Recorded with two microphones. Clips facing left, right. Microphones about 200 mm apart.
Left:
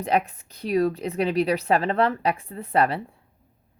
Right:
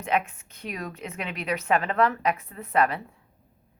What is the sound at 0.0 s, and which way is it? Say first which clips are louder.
A woman's voice: left 3 dB; 35° left (ahead or behind).